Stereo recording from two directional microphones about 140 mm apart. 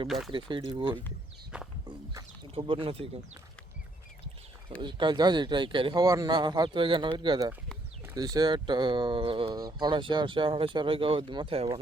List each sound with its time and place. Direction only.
0.3 s speech: 35° right (ahead or behind)
1.5 s speech: 5° right (ahead or behind)
2.1 s speech: 35° right (ahead or behind)
4.8 s speech: 35° right (ahead or behind)